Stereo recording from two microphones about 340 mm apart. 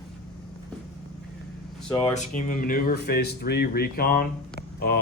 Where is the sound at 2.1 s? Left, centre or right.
Left.